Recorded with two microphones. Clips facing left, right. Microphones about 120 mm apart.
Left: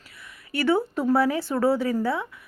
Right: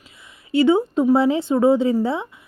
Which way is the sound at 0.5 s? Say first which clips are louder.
Right 7 dB; 20° right (ahead or behind).